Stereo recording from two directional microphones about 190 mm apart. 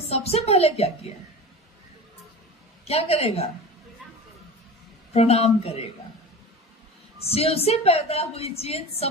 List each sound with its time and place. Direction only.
0.1 s a woman's voice: 35° left (ahead or behind)
2.8 s a woman's voice: 30° left (ahead or behind)
5.1 s a woman's voice: 35° left (ahead or behind)
7.3 s a woman's voice: 30° left (ahead or behind)